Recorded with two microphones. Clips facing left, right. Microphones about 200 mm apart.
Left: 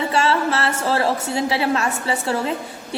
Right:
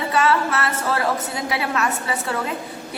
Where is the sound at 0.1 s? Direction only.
30° left (ahead or behind).